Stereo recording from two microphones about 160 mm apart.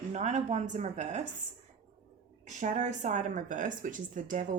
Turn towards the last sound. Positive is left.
turn(degrees=-55)  # may be behind; listen again after turning